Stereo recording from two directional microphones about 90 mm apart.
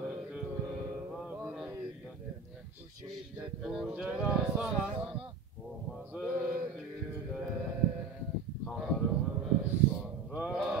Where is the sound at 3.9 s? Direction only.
20° right (ahead or behind).